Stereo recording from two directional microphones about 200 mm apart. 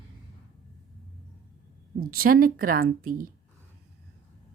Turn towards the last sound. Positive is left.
turn(degrees=-45)  # may be behind; listen again after turning